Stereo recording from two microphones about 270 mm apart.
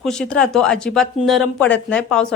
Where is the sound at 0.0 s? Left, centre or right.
Centre.